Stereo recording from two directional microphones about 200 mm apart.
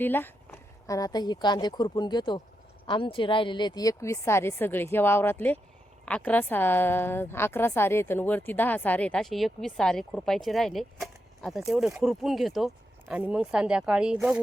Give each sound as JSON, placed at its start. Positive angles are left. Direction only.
{"t": 0.0, "sound": "a woman's voice", "side_deg": 10}